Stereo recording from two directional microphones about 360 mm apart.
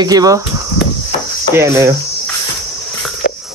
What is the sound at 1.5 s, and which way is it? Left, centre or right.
Speech, centre.